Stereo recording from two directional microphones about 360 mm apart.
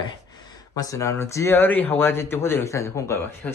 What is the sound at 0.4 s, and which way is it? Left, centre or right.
Speech, centre.